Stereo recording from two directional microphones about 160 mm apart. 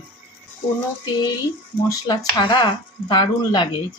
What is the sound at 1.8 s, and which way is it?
Speech, 25° left (ahead or behind).